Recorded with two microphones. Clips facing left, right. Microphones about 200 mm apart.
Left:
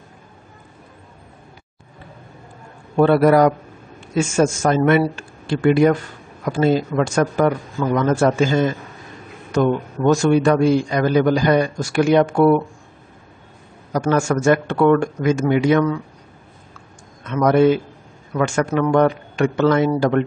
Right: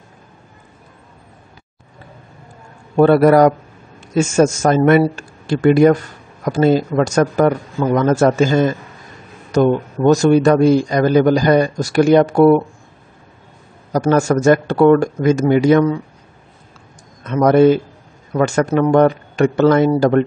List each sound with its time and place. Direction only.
3.0 s a man's voice: 45° right (ahead or behind)
13.9 s a man's voice: 40° right (ahead or behind)
17.2 s a man's voice: 40° right (ahead or behind)